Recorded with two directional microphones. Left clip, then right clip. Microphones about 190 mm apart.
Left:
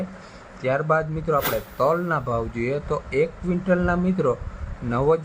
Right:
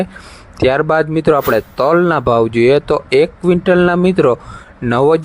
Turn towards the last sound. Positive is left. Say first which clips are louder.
# right 9 dB
turn(degrees=-50)  # may be behind; listen again after turning